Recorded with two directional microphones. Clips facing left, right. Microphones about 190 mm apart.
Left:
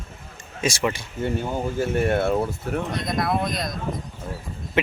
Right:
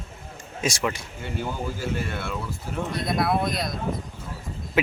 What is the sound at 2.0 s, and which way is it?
Speech, 45° left (ahead or behind).